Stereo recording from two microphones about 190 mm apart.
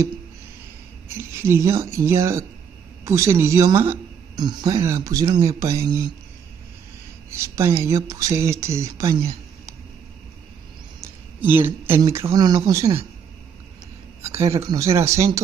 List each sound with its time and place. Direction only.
1.0 s speech: 15° right (ahead or behind)
7.2 s speech: 15° right (ahead or behind)
11.0 s speech: 10° right (ahead or behind)
14.2 s speech: 15° right (ahead or behind)